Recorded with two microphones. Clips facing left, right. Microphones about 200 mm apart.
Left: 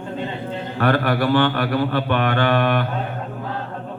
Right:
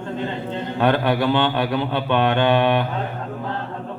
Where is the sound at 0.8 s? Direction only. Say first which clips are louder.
Even; 20° right (ahead or behind).